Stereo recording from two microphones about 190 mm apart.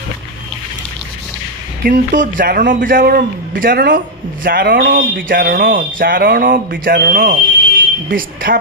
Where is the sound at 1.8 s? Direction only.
50° right (ahead or behind).